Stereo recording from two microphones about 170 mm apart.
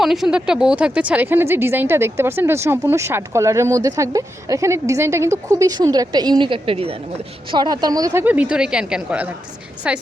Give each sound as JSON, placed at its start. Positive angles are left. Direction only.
{"t": 0.0, "sound": "a woman's voice", "side_deg": 0}
{"t": 8.2, "sound": "speech", "side_deg": -10}